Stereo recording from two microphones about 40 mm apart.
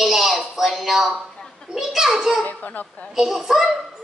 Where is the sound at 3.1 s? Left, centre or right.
Centre.